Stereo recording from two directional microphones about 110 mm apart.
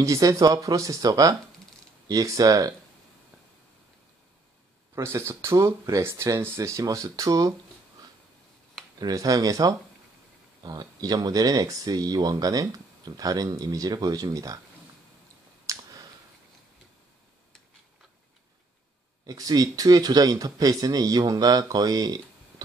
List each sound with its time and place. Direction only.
0.0 s speech: 30° right (ahead or behind)
4.9 s speech: 25° right (ahead or behind)
9.0 s speech: 35° right (ahead or behind)
15.6 s clicking: 30° right (ahead or behind)
19.2 s speech: 35° right (ahead or behind)